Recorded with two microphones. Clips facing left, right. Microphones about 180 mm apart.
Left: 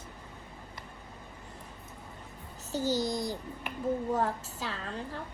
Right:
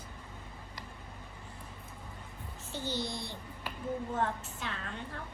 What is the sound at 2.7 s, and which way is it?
A woman's voice, 40° left (ahead or behind).